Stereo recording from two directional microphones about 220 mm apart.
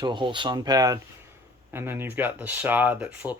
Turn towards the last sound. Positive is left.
turn(degrees=-10)  # may be behind; listen again after turning